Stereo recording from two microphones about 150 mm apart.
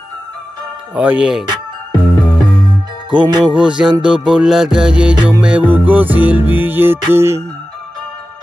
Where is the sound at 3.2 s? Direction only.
30° right (ahead or behind).